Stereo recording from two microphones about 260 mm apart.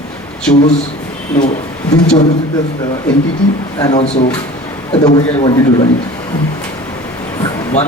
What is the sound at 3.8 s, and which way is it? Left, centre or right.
A man's voice, left.